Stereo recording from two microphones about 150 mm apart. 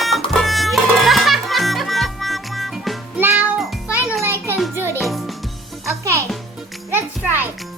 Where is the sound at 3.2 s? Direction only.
15° right (ahead or behind).